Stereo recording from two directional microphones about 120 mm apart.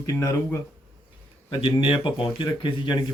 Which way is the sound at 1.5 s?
45° left (ahead or behind).